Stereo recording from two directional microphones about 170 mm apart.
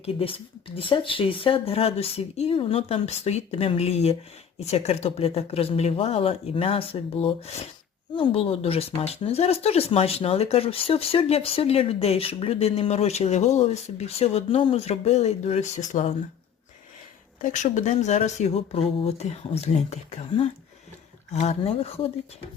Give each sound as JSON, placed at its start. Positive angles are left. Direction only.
{"t": 0.0, "sound": "speech", "side_deg": 35}
{"t": 17.4, "sound": "speech", "side_deg": 45}
{"t": 21.3, "sound": "speech", "side_deg": 40}